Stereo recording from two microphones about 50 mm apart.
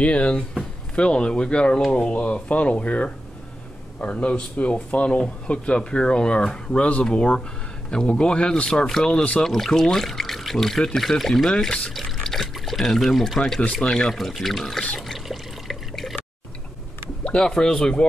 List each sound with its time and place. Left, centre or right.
0.0 s speech: left
1.8 s speech: centre
2.0 s speech: left; by 14.8 s centre
15.0 s water: centre
17.2 s a sound: left
17.5 s speech: centre